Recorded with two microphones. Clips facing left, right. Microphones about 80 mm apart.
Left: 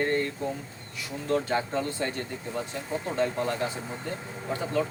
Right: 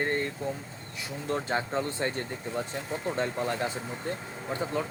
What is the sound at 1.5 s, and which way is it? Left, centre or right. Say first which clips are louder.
Speech: left 1 dB; right.